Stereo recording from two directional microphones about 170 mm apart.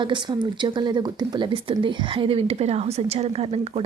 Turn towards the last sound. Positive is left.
turn(degrees=-35)  # may be behind; listen again after turning